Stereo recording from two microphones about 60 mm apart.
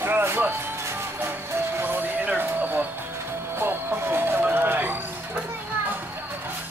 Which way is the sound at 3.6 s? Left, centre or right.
Right.